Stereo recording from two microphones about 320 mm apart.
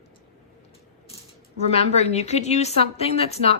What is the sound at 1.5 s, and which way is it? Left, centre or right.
A woman's voice, centre.